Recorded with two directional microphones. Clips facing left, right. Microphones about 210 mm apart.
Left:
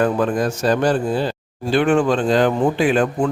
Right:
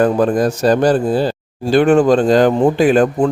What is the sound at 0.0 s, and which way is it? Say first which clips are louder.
Speech: right 5 dB; 35° right (ahead or behind).